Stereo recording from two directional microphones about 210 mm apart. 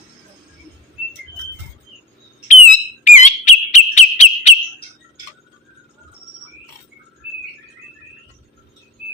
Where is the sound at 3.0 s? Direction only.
35° left (ahead or behind).